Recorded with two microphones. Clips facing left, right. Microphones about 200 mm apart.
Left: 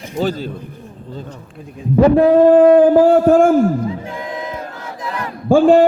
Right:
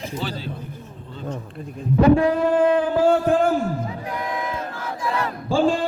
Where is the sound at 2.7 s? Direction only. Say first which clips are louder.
Left 9 dB; 40° left (ahead or behind).